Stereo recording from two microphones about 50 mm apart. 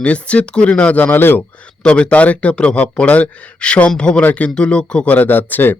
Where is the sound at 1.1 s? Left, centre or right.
Left.